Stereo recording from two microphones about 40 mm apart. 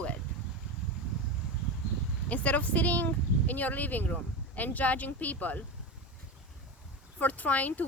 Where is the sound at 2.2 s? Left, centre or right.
Left.